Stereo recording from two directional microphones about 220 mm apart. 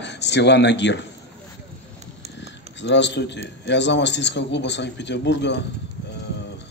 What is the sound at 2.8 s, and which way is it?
A man's voice, 55° left (ahead or behind).